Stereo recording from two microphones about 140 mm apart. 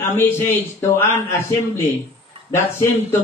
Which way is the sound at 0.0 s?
15° left (ahead or behind).